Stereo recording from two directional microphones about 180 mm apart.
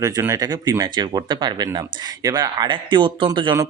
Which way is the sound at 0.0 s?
15° right (ahead or behind).